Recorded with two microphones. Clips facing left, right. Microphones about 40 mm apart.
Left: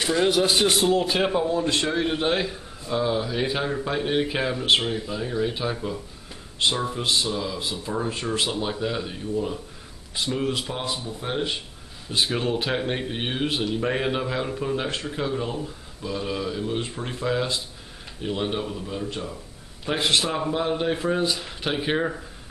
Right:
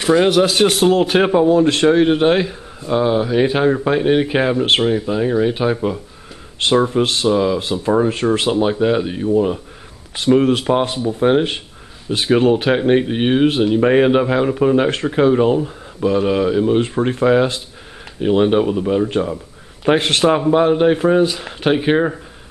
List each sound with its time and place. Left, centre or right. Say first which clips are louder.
0.5 s a man's voice: right 6 dB; right
0.8 s a man's voice: right 8 dB; right
20.5 s speech: right 11 dB; right